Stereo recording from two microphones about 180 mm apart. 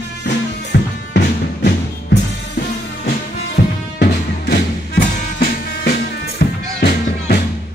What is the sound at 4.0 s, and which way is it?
Music, 65° left (ahead or behind).